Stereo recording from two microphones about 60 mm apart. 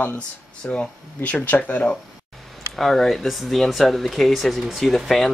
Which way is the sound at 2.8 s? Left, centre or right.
Centre.